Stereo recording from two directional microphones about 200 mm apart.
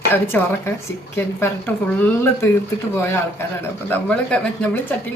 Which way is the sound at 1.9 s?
10° left (ahead or behind).